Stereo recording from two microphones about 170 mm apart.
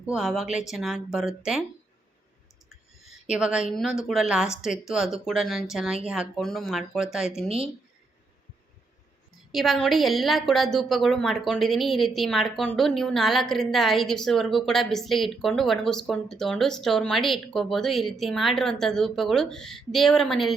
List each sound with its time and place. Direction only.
0.0 s a woman's voice: 5° right (ahead or behind)
3.2 s a woman's voice: 5° right (ahead or behind)
9.5 s a woman's voice: centre (ahead or behind)